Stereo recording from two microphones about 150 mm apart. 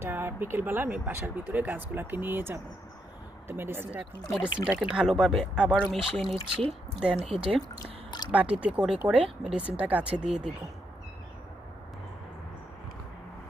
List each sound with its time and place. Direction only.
0.0 s speech: 15° right (ahead or behind)
7.8 s speech: 25° left (ahead or behind)
8.3 s speech: 10° right (ahead or behind)